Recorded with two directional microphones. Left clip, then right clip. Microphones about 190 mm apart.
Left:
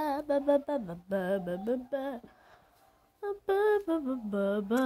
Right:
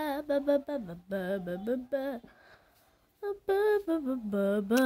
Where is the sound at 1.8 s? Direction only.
20° right (ahead or behind).